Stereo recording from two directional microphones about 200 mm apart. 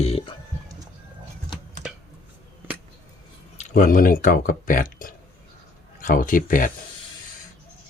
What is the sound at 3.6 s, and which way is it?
Speech, 40° left (ahead or behind).